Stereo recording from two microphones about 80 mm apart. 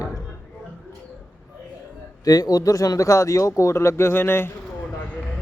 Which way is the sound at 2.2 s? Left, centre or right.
Left.